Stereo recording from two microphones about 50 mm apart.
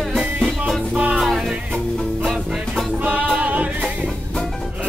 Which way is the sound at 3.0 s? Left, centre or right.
Right.